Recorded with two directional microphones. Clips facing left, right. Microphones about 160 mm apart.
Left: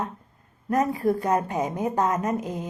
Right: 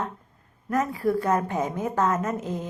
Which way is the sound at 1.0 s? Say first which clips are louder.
Even; 15° left (ahead or behind).